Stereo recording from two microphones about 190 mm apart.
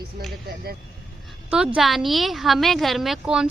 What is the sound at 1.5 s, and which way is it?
A woman's voice, 5° right (ahead or behind).